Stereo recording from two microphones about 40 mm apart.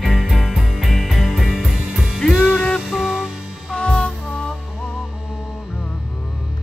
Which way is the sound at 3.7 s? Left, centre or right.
Left.